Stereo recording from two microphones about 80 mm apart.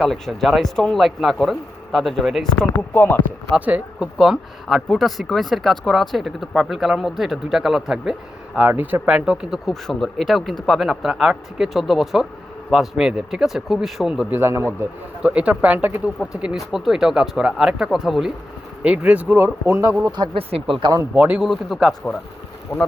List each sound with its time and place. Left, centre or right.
0.0 s speech: centre
2.6 s speech: left
3.5 s speech: centre
4.2 s speech: centre
8.5 s speech: right
9.8 s speech: centre
14.3 s a man's voice: right; by 18.3 s centre
18.8 s a man's voice: centre; by 20.0 s right
20.1 s speech: right
20.3 s speech: right
21.0 s a man's voice: right
21.3 s speech: centre
22.7 s speech: left